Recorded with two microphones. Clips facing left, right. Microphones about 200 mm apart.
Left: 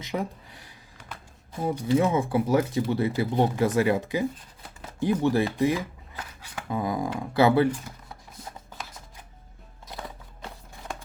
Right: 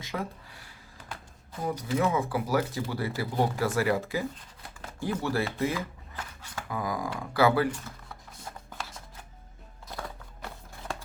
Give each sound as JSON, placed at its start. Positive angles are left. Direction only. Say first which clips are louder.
{"t": 0.0, "sound": "speech", "louder": "left 4 dB", "side_deg": 20}